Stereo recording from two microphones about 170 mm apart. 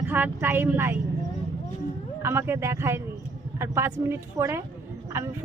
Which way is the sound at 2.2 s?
15° right (ahead or behind).